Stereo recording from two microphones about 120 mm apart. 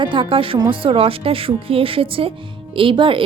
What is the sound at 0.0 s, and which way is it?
A woman's voice, 45° right (ahead or behind).